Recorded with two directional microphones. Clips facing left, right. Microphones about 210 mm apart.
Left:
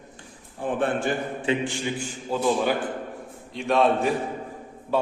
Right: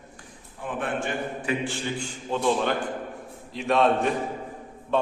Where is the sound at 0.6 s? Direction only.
35° left (ahead or behind).